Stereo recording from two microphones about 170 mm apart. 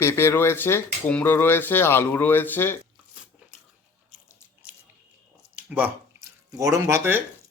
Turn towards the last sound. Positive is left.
turn(degrees=-15)  # may be behind; listen again after turning